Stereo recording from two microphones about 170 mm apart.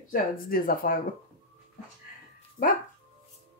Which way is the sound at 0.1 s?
55° left (ahead or behind).